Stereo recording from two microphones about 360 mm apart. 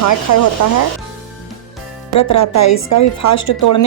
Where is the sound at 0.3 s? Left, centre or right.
Left.